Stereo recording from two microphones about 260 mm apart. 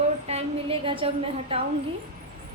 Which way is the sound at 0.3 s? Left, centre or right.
Right.